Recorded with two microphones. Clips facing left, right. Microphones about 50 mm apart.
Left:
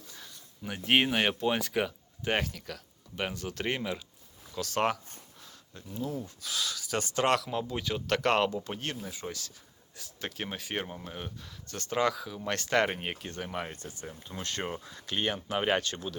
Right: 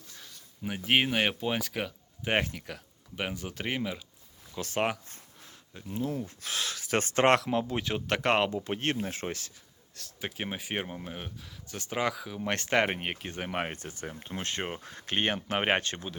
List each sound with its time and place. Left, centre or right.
0.9 s speech: centre
2.2 s speech: right
5.5 s a sound: right
6.1 s speech: right
9.0 s speech: right
10.2 s speech: centre
12.4 s speech: right
13.4 s speech: right
13.8 s speech: right